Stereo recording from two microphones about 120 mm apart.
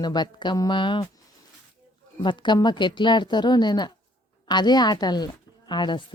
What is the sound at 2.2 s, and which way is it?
A woman's voice, 40° left (ahead or behind).